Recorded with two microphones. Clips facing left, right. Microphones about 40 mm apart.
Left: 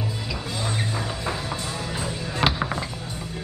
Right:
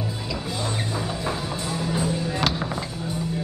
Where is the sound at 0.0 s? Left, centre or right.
Centre.